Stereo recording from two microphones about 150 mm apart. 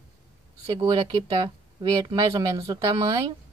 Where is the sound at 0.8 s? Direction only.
30° right (ahead or behind).